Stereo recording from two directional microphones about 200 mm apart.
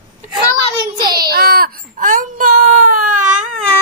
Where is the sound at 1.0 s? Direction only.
20° right (ahead or behind).